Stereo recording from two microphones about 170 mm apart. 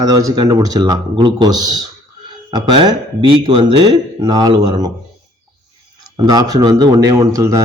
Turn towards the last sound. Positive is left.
turn(degrees=-20)  # may be behind; listen again after turning